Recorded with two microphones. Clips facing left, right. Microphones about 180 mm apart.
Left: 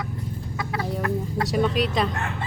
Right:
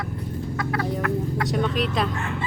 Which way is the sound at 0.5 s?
15° left (ahead or behind).